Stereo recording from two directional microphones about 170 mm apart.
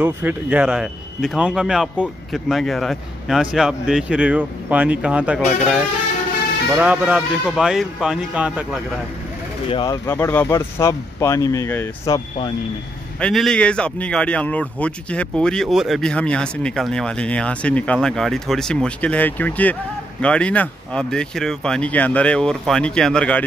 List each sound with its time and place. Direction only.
0.0 s speech: 10° right (ahead or behind)
6.8 s speech: 10° right (ahead or behind)
9.7 s speech: 30° left (ahead or behind)
10.0 s speech: 10° left (ahead or behind)
13.2 s speech: centre (ahead or behind)